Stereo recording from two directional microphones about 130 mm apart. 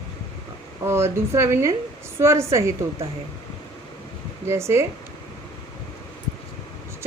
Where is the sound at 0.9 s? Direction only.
20° right (ahead or behind).